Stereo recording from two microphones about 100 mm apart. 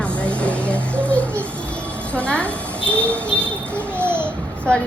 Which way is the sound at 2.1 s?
10° left (ahead or behind).